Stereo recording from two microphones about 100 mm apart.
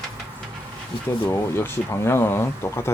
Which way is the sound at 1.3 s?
25° left (ahead or behind).